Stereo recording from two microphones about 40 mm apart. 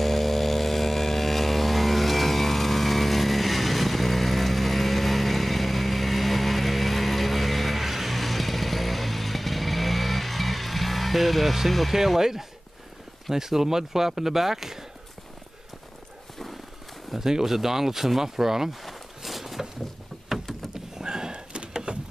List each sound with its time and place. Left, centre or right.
0.0 s vehicle: centre
13.3 s speech: centre
17.1 s speech: centre
20.7 s a sound: centre